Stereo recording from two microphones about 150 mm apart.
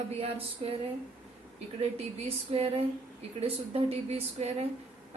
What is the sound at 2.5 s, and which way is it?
A woman's voice, 40° right (ahead or behind).